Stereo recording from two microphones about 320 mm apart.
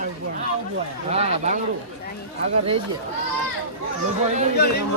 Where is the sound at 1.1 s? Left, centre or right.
Centre.